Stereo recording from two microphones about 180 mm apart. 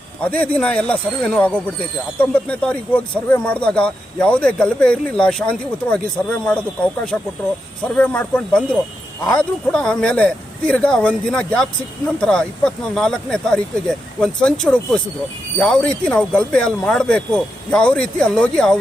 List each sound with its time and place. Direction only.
0.2 s speech: 10° left (ahead or behind)